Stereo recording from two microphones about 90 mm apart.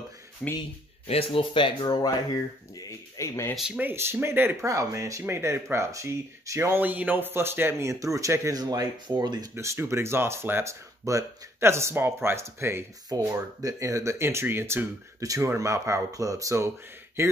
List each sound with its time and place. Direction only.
0.4 s speech: 5° left (ahead or behind)
1.0 s speech: 90° left; by 2.0 s 65° left (ahead or behind)
3.2 s speech: 30° left (ahead or behind)
3.5 s speech: 10° right (ahead or behind)
3.8 s speech: 25° right (ahead or behind)
6.8 s speech: 20° right (ahead or behind); by 9.5 s 50° right (ahead or behind)
9.6 s speech: 30° right (ahead or behind)
13.1 s speech: 40° right (ahead or behind)